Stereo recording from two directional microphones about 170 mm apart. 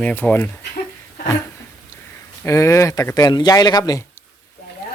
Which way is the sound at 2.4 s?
15° left (ahead or behind).